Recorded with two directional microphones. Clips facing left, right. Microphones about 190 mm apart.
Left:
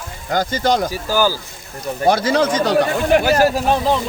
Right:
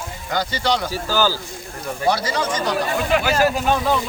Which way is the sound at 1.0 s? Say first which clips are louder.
Left 1 dB; 15° left (ahead or behind).